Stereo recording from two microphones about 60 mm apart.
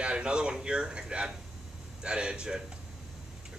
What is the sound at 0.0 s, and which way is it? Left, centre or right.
Speech, centre.